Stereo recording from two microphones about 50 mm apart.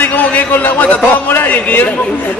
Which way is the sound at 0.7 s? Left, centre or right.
Left.